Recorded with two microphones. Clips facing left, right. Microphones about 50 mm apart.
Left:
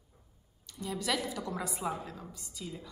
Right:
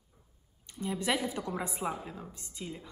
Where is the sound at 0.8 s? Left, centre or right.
Right.